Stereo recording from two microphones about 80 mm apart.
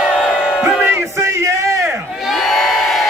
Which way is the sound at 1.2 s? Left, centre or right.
Right.